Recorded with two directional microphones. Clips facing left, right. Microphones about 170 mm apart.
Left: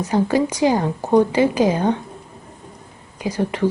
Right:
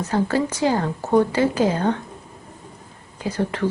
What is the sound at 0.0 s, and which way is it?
A woman's voice, 15° left (ahead or behind).